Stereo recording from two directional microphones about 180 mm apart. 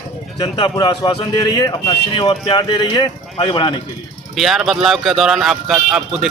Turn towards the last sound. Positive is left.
turn(degrees=0)  # may be behind; listen again after turning